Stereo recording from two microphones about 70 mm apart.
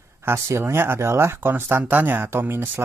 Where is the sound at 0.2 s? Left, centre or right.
Right.